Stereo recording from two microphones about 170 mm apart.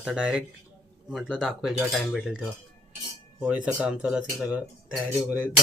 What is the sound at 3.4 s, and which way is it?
Speech, 10° right (ahead or behind).